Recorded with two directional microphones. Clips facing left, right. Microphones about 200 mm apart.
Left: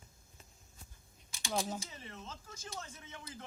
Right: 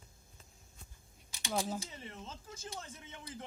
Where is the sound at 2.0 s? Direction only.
30° right (ahead or behind).